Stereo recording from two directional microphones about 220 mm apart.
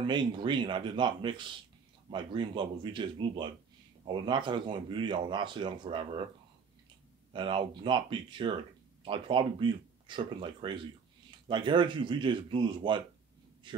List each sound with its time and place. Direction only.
0.0 s speech: 20° right (ahead or behind)
7.3 s a man's voice: 20° right (ahead or behind)